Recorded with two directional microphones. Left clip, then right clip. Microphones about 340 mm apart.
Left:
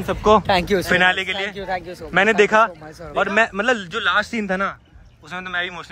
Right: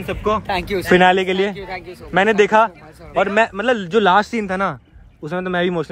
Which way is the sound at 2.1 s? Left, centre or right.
Centre.